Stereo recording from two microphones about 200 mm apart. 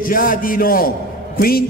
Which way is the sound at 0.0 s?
45° left (ahead or behind).